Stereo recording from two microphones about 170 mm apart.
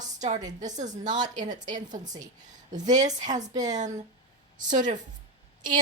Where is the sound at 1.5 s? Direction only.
25° right (ahead or behind).